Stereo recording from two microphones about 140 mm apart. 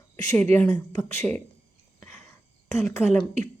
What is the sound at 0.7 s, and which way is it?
Speech, 25° left (ahead or behind).